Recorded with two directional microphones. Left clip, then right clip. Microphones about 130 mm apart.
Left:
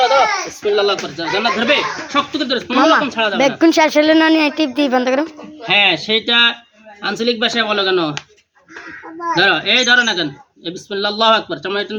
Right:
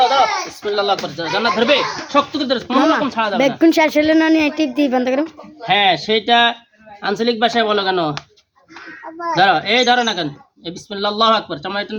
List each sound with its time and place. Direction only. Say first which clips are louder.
0.6 s speech: left 3 dB; 25° right (ahead or behind)
4.0 s a sound: left 2 dB; 10° right (ahead or behind)
5.6 s speech: left 1 dB; 30° right (ahead or behind)
9.3 s speech: even; 35° right (ahead or behind)